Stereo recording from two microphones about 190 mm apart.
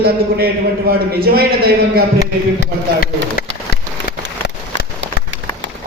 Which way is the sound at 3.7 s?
55° left (ahead or behind).